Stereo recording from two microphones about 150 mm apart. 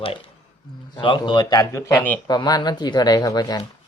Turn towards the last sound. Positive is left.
turn(degrees=25)  # may be behind; listen again after turning